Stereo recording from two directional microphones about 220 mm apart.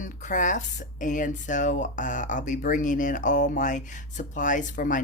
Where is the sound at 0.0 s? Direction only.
35° left (ahead or behind).